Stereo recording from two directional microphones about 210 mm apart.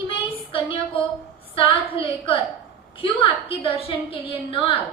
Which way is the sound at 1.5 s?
25° left (ahead or behind).